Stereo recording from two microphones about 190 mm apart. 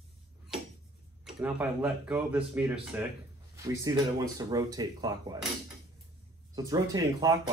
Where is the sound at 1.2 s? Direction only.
5° right (ahead or behind).